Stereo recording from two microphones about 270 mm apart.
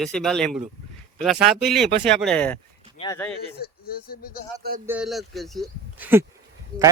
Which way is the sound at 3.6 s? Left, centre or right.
Left.